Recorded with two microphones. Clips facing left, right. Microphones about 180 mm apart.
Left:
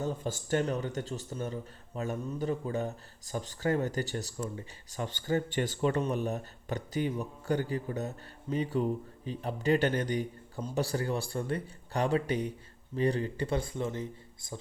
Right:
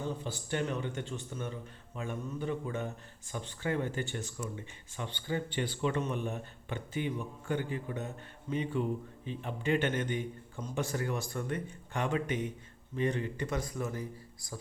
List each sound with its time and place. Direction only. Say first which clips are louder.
0.0 s a man's voice: left 3 dB; 45° left (ahead or behind); by 14.6 s 25° left (ahead or behind)